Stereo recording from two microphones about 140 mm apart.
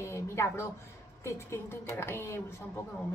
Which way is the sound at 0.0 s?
20° left (ahead or behind).